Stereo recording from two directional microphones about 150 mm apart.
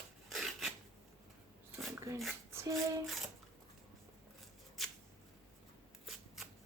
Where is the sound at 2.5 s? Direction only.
15° right (ahead or behind).